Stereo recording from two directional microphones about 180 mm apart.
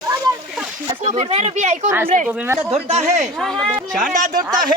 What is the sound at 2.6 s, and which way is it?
Speech, 35° right (ahead or behind).